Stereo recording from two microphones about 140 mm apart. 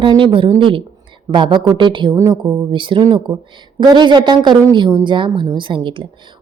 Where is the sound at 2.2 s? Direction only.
20° right (ahead or behind).